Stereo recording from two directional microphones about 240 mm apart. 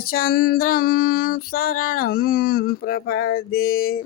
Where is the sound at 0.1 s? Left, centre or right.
Left.